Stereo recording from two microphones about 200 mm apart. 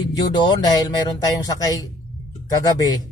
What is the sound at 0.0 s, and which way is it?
A man's voice, 20° left (ahead or behind).